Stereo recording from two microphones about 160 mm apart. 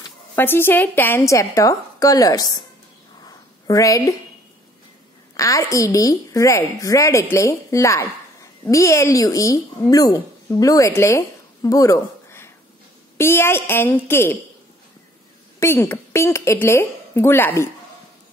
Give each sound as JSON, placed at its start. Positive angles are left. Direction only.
{"t": 0.4, "sound": "a woman's voice", "side_deg": 15}
{"t": 3.3, "sound": "a sound", "side_deg": 25}
{"t": 5.3, "sound": "a woman's voice", "side_deg": 20}
{"t": 15.6, "sound": "a woman's voice", "side_deg": 15}